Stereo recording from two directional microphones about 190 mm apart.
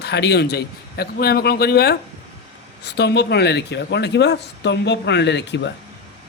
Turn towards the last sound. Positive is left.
turn(degrees=65)  # may be behind; listen again after turning